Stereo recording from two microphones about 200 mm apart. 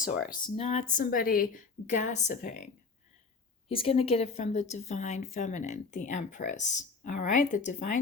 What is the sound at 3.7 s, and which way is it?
Speech, 30° left (ahead or behind).